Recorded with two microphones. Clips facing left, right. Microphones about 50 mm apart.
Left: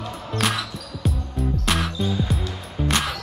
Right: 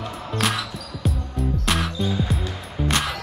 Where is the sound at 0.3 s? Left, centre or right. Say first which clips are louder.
Even; centre.